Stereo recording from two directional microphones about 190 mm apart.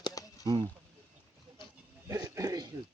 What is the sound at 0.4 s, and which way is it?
Speech, 20° right (ahead or behind).